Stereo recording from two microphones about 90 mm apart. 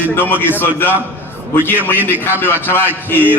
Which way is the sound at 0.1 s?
25° left (ahead or behind).